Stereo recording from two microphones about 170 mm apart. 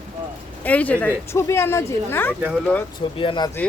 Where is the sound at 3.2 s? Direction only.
30° left (ahead or behind).